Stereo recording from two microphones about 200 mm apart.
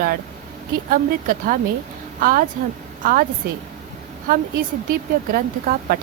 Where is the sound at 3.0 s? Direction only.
45° right (ahead or behind).